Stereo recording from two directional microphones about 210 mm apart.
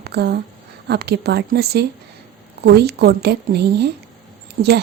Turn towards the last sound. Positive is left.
turn(degrees=-55)  # may be behind; listen again after turning